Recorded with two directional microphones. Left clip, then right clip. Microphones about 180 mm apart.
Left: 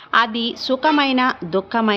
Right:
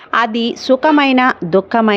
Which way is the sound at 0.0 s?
40° right (ahead or behind).